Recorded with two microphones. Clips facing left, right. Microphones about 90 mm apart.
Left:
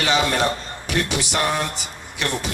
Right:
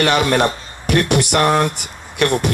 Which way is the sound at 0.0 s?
60° right (ahead or behind).